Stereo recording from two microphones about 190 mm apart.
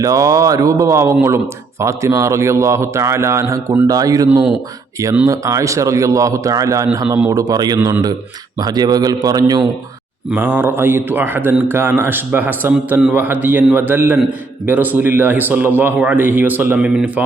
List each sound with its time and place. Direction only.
0.0 s a man's voice: 15° right (ahead or behind)
4.3 s a man's voice: 5° right (ahead or behind)